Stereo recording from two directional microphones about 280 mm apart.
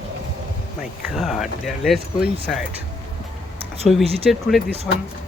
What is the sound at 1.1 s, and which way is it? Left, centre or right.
Speech, centre.